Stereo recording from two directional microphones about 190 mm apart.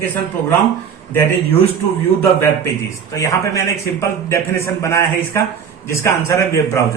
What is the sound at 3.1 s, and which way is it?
A man's voice, 15° left (ahead or behind).